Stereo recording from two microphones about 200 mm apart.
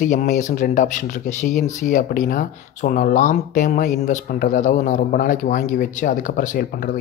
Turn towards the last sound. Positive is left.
turn(degrees=45)  # may be behind; listen again after turning